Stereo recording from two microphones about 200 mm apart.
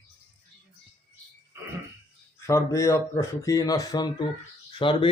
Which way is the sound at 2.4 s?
15° left (ahead or behind).